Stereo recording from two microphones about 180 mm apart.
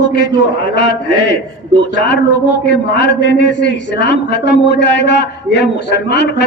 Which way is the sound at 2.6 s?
70° left (ahead or behind).